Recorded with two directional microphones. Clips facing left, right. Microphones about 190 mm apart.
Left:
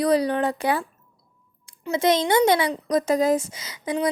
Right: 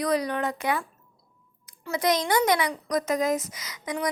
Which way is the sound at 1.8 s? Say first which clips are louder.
Left 4 dB; 25° left (ahead or behind).